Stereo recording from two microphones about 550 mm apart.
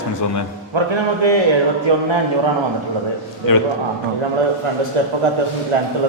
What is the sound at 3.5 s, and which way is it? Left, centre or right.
Speech, left.